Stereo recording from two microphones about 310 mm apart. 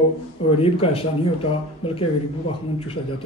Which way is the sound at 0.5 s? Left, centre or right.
Centre.